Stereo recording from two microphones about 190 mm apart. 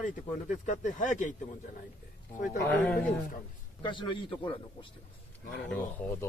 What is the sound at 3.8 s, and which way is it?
Speech, 25° left (ahead or behind).